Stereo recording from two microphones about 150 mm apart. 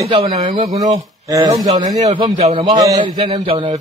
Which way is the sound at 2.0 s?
45° right (ahead or behind).